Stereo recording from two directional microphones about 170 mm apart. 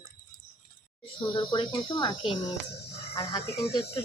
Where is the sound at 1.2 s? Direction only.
30° left (ahead or behind).